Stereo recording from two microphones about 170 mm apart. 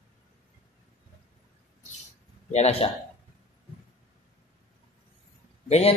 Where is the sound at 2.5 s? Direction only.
40° left (ahead or behind).